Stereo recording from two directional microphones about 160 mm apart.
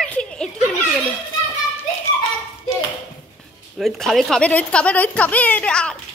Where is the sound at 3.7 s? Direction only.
Centre (ahead or behind).